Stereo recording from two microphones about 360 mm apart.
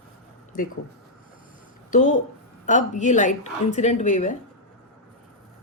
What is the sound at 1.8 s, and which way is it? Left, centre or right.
A woman's voice, left.